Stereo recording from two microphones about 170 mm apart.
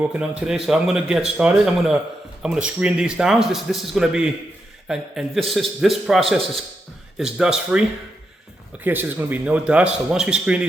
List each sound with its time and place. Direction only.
0.0 s a man's voice: 10° right (ahead or behind)